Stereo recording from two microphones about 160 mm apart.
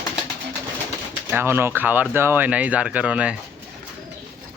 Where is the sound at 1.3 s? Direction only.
15° right (ahead or behind).